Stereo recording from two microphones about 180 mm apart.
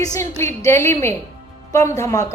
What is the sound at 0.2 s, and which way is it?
A woman's voice, 15° left (ahead or behind).